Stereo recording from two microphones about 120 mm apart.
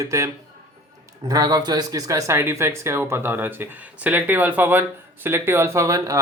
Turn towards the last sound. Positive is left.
turn(degrees=-25)  # may be behind; listen again after turning